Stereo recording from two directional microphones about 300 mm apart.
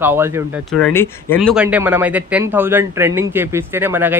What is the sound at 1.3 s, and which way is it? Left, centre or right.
Speech, centre.